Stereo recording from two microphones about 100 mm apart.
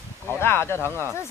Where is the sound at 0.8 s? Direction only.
20° right (ahead or behind).